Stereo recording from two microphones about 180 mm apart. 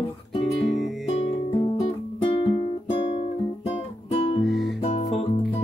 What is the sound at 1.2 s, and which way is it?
Music, 35° left (ahead or behind).